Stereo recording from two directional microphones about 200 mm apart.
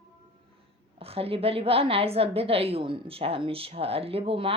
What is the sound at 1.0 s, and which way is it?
A woman's voice, 30° right (ahead or behind).